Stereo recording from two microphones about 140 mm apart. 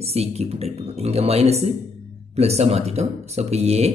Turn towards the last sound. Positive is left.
turn(degrees=-50)  # may be behind; listen again after turning